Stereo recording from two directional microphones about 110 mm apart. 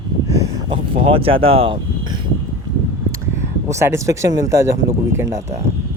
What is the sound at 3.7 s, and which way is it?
Speech, 25° right (ahead or behind).